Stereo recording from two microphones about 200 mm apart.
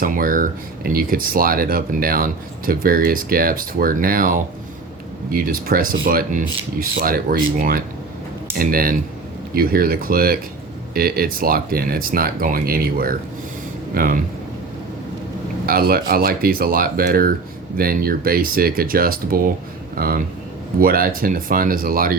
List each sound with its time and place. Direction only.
0.0 s speech: 45° right (ahead or behind)
15.6 s speech: 50° right (ahead or behind)